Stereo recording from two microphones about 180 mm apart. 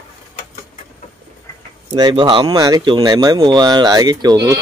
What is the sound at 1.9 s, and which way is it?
Speech, 20° right (ahead or behind).